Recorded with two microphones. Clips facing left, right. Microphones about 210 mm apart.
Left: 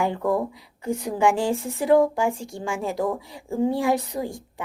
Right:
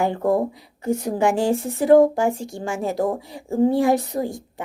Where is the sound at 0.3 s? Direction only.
40° right (ahead or behind).